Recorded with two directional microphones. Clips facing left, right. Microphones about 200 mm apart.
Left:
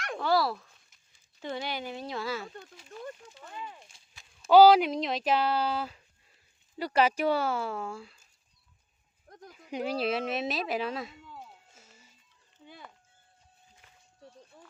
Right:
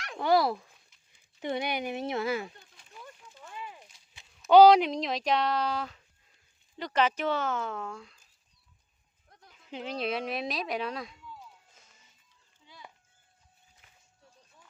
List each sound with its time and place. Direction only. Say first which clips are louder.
0.2 s speech: right 3 dB; 15° right (ahead or behind)
3.9 s a sound: left 2 dB; 25° left (ahead or behind)
4.5 s speech: even; 5° left (ahead or behind)
9.3 s sheep: left 10 dB; 45° left (ahead or behind)
9.6 s speech: left 3 dB; 10° left (ahead or behind)
11.2 s a sound: left 1 dB; 60° left (ahead or behind)